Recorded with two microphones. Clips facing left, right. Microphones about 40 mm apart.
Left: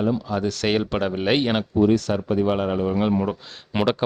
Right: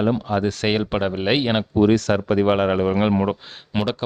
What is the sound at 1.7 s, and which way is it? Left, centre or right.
Speech, right.